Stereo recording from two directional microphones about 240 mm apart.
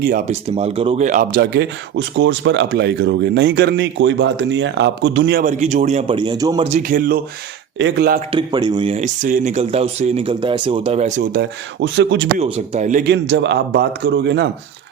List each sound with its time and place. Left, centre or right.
0.0 s speech: right
0.5 s speech: right
5.5 s speech: right
6.7 s speech: right
8.3 s speech: centre
11.3 s speech: right
12.4 s speech: right